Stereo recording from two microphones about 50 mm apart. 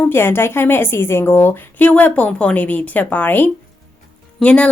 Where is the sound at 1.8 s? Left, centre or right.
Left.